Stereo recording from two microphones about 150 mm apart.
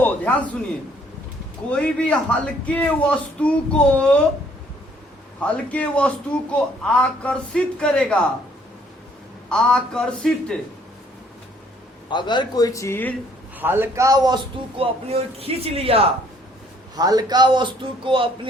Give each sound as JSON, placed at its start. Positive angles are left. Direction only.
{"t": 0.0, "sound": "a sound", "side_deg": 10}
{"t": 1.7, "sound": "speech", "side_deg": 10}
{"t": 5.6, "sound": "speech", "side_deg": 10}
{"t": 9.5, "sound": "a man's voice", "side_deg": 5}
{"t": 12.0, "sound": "a man's voice", "side_deg": 30}
{"t": 13.6, "sound": "a man's voice", "side_deg": -15}
{"t": 14.8, "sound": "a man's voice", "side_deg": -40}
{"t": 16.9, "sound": "a man's voice", "side_deg": -25}